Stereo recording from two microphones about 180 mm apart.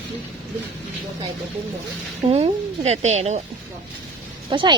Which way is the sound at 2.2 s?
35° right (ahead or behind).